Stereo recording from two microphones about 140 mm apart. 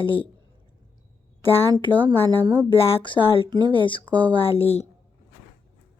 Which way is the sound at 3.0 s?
40° left (ahead or behind).